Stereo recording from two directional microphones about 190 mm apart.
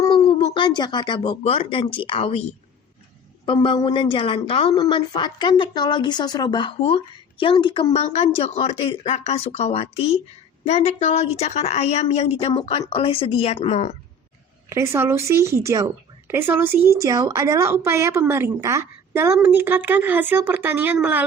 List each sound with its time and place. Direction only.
0.0 s speech: 15° left (ahead or behind)
3.4 s a woman's voice: 25° left (ahead or behind)
14.7 s a woman's voice: 15° right (ahead or behind)